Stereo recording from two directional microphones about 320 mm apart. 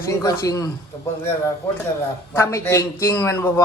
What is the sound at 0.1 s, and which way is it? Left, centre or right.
Speech, centre.